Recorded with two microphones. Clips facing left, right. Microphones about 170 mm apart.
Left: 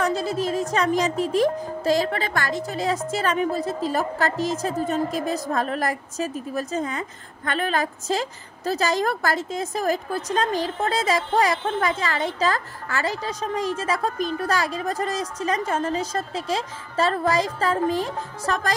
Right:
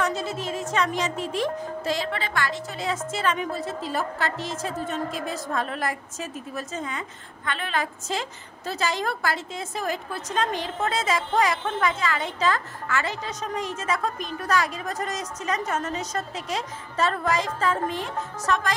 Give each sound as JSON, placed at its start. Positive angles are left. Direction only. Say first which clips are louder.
{"t": 0.0, "sound": "speech", "louder": "left 4 dB", "side_deg": 35}